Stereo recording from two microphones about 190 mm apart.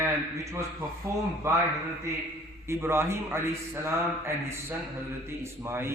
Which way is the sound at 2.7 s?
15° right (ahead or behind).